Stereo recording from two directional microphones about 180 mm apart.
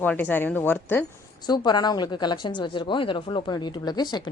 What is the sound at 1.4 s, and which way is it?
A woman's voice, 25° left (ahead or behind).